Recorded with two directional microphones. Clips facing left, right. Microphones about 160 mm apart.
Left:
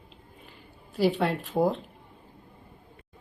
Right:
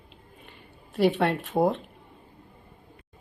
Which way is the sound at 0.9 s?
65° right (ahead or behind).